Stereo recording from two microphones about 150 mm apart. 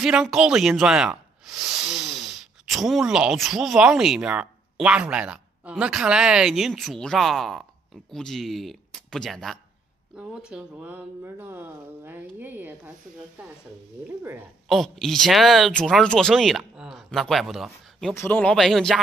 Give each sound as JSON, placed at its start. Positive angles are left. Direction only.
{"t": 0.0, "sound": "speech", "side_deg": -5}
{"t": 14.0, "sound": "speech", "side_deg": -15}
{"t": 14.7, "sound": "speech", "side_deg": 0}
{"t": 18.1, "sound": "speech", "side_deg": 15}